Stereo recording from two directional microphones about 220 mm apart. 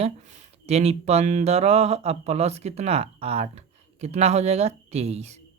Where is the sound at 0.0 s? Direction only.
30° right (ahead or behind).